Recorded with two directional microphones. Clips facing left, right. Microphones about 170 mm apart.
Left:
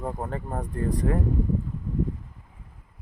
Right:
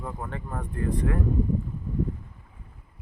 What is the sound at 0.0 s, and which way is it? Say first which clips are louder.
Speech: left 4 dB; 40° left (ahead or behind).